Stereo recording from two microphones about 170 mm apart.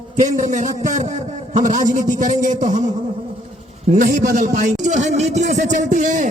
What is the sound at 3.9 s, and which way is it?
A man's voice, 50° right (ahead or behind).